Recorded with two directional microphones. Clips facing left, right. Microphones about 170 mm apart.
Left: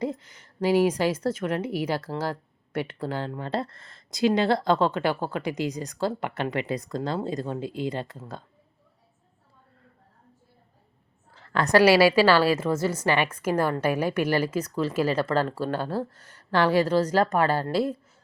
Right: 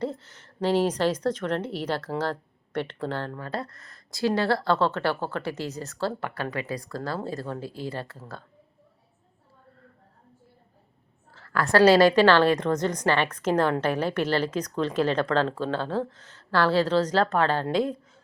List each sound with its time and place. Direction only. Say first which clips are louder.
0.0 s a woman's voice: left 1 dB; 10° left (ahead or behind)
3.4 s speech: left 3 dB; 25° left (ahead or behind)
11.3 s speech: left 2 dB; 20° left (ahead or behind)